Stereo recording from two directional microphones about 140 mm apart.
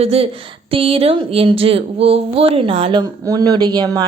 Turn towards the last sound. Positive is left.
turn(degrees=-30)  # may be behind; listen again after turning